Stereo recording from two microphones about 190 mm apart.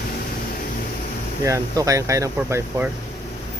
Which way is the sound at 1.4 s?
15° right (ahead or behind).